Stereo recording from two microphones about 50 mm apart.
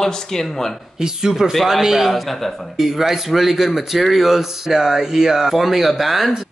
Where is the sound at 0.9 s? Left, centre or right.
Centre.